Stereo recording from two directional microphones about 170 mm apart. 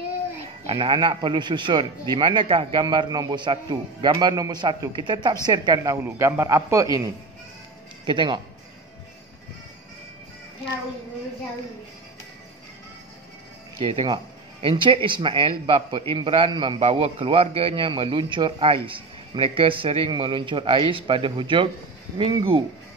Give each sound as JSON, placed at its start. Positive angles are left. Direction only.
{"t": 0.7, "sound": "a man's voice", "side_deg": -30}
{"t": 8.1, "sound": "a man's voice", "side_deg": -30}
{"t": 14.0, "sound": "speech", "side_deg": -30}